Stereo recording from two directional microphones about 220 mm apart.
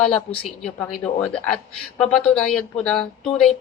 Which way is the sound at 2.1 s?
Centre (ahead or behind).